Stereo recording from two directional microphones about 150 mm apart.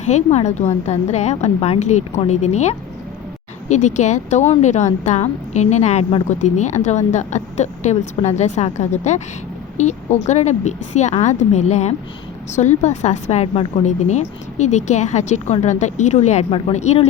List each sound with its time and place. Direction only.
0.1 s a woman's voice: 50° left (ahead or behind)
6.2 s a woman's voice: 50° left (ahead or behind)